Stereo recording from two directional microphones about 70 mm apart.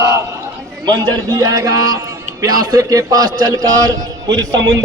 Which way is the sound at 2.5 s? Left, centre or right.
Right.